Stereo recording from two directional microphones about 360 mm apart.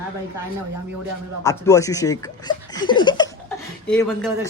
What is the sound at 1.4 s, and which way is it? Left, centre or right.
A man's voice, centre.